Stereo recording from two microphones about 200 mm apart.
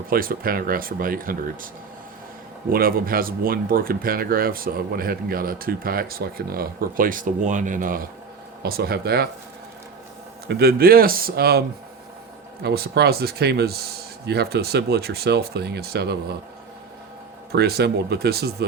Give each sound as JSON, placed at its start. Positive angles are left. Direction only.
{"t": 0.1, "sound": "speech", "side_deg": -45}
{"t": 2.7, "sound": "speech", "side_deg": -45}
{"t": 10.4, "sound": "speech", "side_deg": -50}
{"t": 12.6, "sound": "speech", "side_deg": -55}
{"t": 17.5, "sound": "speech", "side_deg": -55}